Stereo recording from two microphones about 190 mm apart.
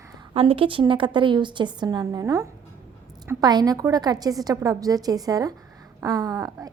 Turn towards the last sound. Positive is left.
turn(degrees=-20)  # may be behind; listen again after turning